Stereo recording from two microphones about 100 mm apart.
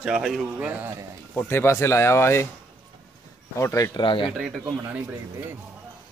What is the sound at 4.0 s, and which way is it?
Speech, 55° left (ahead or behind).